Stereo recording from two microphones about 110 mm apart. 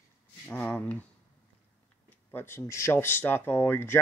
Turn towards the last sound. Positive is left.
turn(degrees=20)  # may be behind; listen again after turning